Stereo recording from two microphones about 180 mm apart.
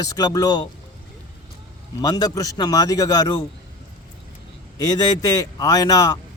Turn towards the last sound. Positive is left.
turn(degrees=20)  # may be behind; listen again after turning